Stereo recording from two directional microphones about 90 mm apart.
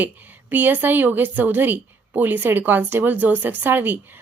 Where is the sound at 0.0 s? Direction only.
20° right (ahead or behind).